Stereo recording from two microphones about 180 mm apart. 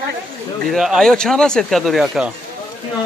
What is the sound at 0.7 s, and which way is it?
Speech, centre (ahead or behind).